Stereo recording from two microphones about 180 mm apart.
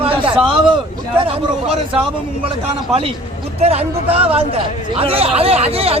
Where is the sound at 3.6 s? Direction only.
35° right (ahead or behind).